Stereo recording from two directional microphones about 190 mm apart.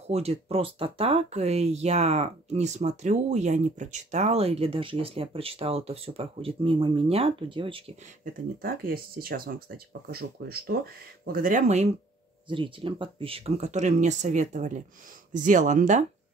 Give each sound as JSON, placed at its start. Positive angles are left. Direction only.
{"t": 0.0, "sound": "speech", "side_deg": -35}
{"t": 8.3, "sound": "speech", "side_deg": -50}
{"t": 12.4, "sound": "speech", "side_deg": -25}